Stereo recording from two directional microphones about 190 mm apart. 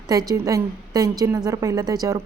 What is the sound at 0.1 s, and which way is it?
Speech, 20° right (ahead or behind).